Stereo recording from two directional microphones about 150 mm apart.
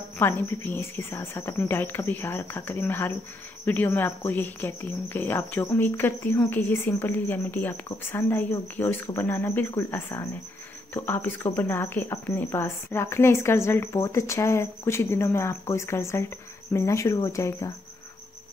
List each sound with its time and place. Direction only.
0.2 s speech: 15° left (ahead or behind)
16.7 s cricket: 20° left (ahead or behind)